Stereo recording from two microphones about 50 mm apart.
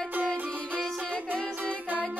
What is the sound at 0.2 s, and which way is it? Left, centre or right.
Music, centre.